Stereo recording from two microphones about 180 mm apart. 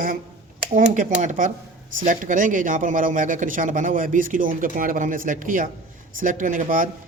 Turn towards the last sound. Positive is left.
turn(degrees=-50)  # may be behind; listen again after turning